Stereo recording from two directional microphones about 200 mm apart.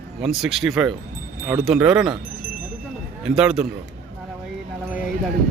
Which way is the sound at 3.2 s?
5° right (ahead or behind).